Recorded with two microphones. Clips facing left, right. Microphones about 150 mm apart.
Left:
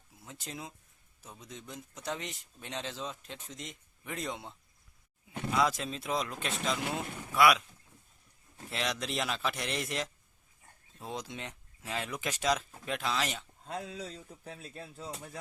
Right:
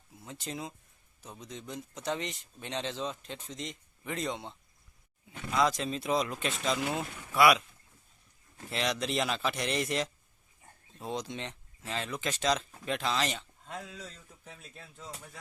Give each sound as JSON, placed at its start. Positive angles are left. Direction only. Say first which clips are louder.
{"t": 0.3, "sound": "speech", "louder": "right 4 dB", "side_deg": 0}
{"t": 8.7, "sound": "speech", "louder": "right 3 dB", "side_deg": 0}
{"t": 13.7, "sound": "speech", "louder": "left 4 dB", "side_deg": 35}